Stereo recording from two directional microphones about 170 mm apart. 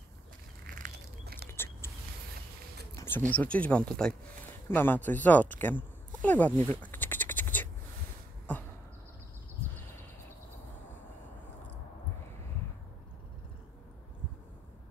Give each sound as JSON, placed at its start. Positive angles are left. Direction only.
{"t": 0.7, "sound": "bird", "side_deg": -65}
{"t": 1.5, "sound": "a sound", "side_deg": 15}
{"t": 3.3, "sound": "speech", "side_deg": 10}